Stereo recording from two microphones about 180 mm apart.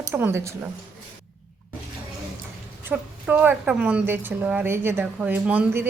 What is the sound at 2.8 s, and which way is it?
Speech, 10° right (ahead or behind).